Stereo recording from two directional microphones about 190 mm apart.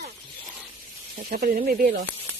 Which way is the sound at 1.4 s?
50° right (ahead or behind).